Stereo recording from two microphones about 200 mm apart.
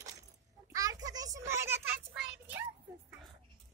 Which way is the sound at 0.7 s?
15° right (ahead or behind).